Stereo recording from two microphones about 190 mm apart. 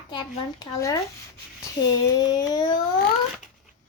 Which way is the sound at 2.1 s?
20° left (ahead or behind).